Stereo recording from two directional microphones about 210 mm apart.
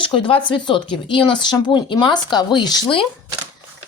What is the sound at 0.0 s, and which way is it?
Speech, 25° left (ahead or behind).